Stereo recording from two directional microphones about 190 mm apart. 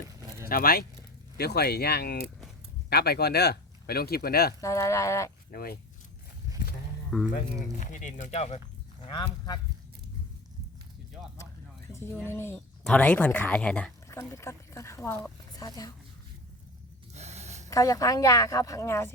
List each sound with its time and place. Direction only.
0.2 s vehicle: 15° right (ahead or behind)
0.4 s speech: 50° left (ahead or behind)
4.6 s speech: 15° left (ahead or behind)
5.5 s speech: 50° left (ahead or behind)
7.3 s speech: 40° left (ahead or behind)
9.0 s a woman's voice: 20° left (ahead or behind)
11.9 s speech: 15° left (ahead or behind)
14.1 s speech: 15° left (ahead or behind)
17.2 s a sound: 35° right (ahead or behind)
17.7 s a woman's voice: 20° left (ahead or behind)